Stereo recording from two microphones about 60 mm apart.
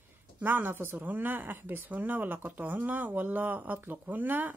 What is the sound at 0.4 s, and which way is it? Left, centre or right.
Speech, right.